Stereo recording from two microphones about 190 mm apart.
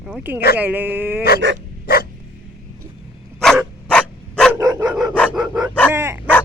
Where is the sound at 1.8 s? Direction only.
50° left (ahead or behind).